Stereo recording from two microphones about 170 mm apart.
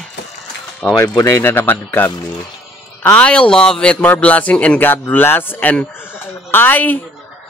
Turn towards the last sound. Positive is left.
turn(degrees=10)  # may be behind; listen again after turning